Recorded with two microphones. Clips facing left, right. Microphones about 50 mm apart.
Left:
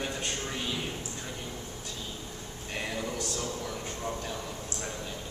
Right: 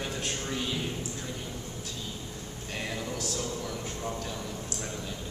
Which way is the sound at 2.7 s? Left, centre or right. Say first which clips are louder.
Left 1 dB; centre.